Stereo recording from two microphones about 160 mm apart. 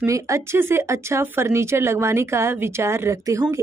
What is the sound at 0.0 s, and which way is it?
Speech, 20° right (ahead or behind).